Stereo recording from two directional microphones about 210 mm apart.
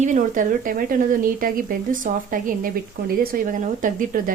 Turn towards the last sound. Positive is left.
turn(degrees=-40)  # may be behind; listen again after turning